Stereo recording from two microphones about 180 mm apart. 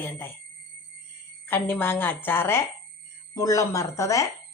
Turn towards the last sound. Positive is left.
turn(degrees=15)  # may be behind; listen again after turning